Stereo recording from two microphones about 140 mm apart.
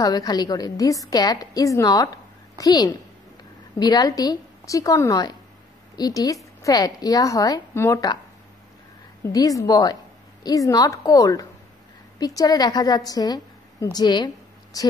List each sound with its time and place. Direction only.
0.0 s a woman's voice: 30° left (ahead or behind)
9.2 s a woman's voice: 25° left (ahead or behind)